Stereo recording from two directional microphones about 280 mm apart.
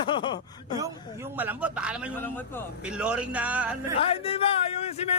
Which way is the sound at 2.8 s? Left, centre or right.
Centre.